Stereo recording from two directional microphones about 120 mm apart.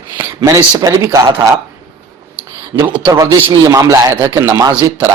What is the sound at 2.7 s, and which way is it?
A man's voice, 30° right (ahead or behind).